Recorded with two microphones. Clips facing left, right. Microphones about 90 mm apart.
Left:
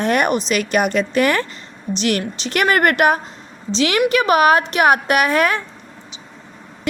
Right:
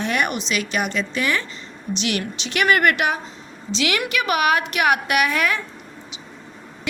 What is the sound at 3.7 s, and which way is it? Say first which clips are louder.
A woman's voice: left 7 dB; 35° left (ahead or behind).